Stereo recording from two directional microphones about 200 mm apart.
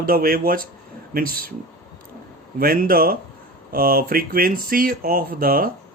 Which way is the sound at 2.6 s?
45° right (ahead or behind).